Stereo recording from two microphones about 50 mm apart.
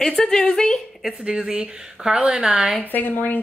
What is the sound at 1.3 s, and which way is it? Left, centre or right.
Speech, centre.